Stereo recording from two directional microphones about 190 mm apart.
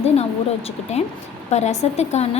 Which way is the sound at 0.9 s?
35° left (ahead or behind).